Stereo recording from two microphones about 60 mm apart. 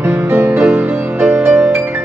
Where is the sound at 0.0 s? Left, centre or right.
Right.